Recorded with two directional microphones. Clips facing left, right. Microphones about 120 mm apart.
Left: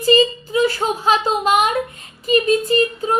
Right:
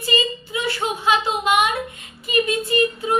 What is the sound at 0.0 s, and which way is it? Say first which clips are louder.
A woman's voice: left 9 dB; 35° left (ahead or behind).